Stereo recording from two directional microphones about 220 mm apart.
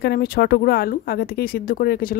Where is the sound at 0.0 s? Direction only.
45° left (ahead or behind).